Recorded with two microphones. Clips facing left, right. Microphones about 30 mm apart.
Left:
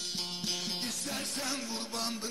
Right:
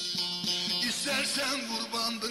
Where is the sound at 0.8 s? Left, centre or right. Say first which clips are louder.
Right 7 dB; right.